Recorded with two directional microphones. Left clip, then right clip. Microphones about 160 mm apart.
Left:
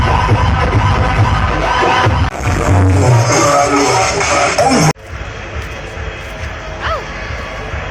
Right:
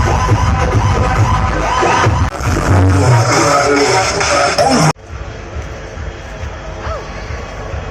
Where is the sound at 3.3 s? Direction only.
50° left (ahead or behind).